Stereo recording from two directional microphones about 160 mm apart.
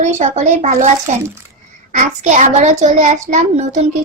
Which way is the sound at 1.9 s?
50° right (ahead or behind).